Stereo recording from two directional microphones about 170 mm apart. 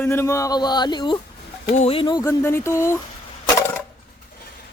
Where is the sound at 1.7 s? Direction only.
40° left (ahead or behind).